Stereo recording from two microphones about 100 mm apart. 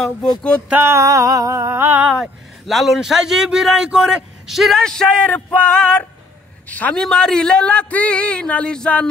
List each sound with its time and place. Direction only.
0.7 s a sound: 20° right (ahead or behind)
2.0 s a man's voice: centre (ahead or behind); by 7.0 s 15° left (ahead or behind)
7.0 s speech: 5° left (ahead or behind)